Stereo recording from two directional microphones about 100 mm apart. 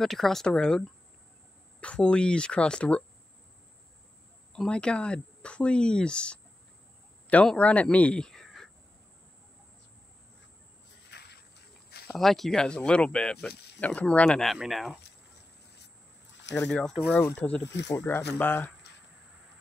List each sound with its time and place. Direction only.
0.0 s speech: 5° left (ahead or behind)
4.5 s speech: 10° left (ahead or behind)
12.1 s speech: centre (ahead or behind)
16.5 s speech: 5° left (ahead or behind)
17.1 s speech: 15° left (ahead or behind)